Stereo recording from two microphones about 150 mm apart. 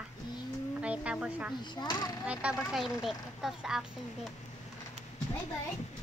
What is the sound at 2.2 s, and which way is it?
Speech, 10° right (ahead or behind).